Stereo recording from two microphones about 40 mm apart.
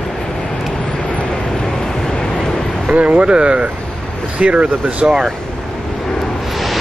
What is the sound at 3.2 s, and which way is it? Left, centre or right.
Speech, right.